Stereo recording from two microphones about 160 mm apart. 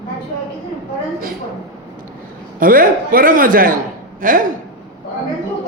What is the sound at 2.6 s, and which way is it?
A man's voice, 60° right (ahead or behind).